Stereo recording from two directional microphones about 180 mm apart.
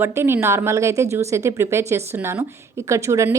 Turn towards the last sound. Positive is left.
turn(degrees=-15)  # may be behind; listen again after turning